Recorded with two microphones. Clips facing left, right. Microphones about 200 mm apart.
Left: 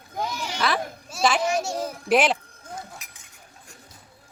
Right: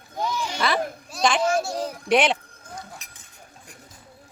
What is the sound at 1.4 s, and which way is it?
Speech, 20° left (ahead or behind).